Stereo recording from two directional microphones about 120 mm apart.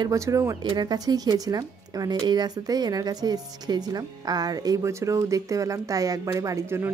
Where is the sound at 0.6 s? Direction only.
35° right (ahead or behind).